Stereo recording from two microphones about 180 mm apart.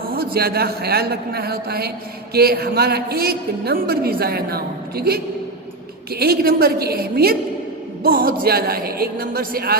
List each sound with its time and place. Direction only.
0.1 s a woman's voice: 60° right (ahead or behind)